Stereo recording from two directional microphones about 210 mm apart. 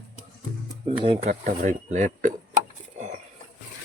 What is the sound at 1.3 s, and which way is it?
Speech, 35° right (ahead or behind).